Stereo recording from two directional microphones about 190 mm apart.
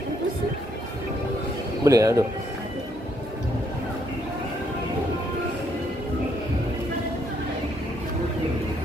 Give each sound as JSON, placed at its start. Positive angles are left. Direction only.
{"t": 1.9, "sound": "speech", "side_deg": -15}